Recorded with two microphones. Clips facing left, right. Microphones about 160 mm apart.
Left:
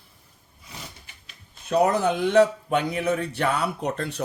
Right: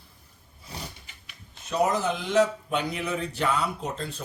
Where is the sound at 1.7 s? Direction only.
60° left (ahead or behind).